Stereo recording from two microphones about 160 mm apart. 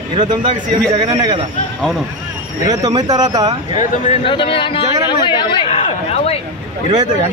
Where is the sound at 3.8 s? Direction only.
35° left (ahead or behind).